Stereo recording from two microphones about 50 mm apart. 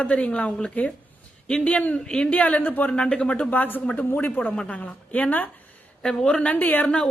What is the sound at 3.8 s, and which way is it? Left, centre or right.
Speech, left.